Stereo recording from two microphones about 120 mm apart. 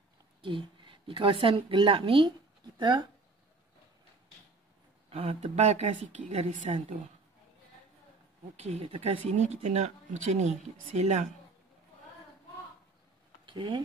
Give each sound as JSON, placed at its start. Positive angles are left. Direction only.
{"t": 0.4, "sound": "a woman's voice", "side_deg": -45}
{"t": 5.1, "sound": "a woman's voice", "side_deg": -60}
{"t": 8.5, "sound": "a woman's voice", "side_deg": -60}
{"t": 9.3, "sound": "speech", "side_deg": -70}
{"t": 13.5, "sound": "speech", "side_deg": -40}